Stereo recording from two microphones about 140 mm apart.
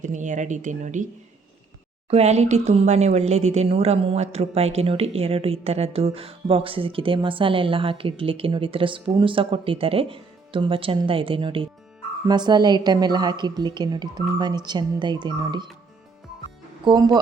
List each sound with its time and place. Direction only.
0.0 s speech: 60° right (ahead or behind)
2.0 s speech: 50° right (ahead or behind); by 15.6 s 30° right (ahead or behind)
16.8 s speech: 30° right (ahead or behind)